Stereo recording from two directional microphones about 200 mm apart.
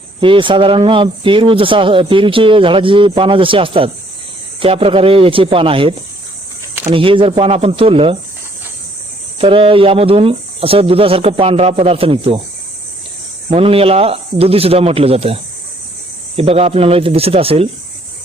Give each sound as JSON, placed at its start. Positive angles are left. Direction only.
{"t": 0.2, "sound": "speech", "side_deg": -25}
{"t": 6.9, "sound": "speech", "side_deg": -25}
{"t": 9.4, "sound": "speech", "side_deg": -25}
{"t": 13.5, "sound": "speech", "side_deg": -30}